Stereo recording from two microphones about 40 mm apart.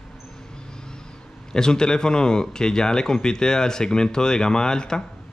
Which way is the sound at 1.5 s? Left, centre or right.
Centre.